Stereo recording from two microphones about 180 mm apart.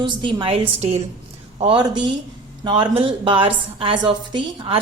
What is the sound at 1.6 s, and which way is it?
A woman's voice, 25° right (ahead or behind).